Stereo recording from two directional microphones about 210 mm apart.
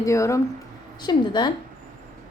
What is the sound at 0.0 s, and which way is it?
A woman's voice, 15° left (ahead or behind).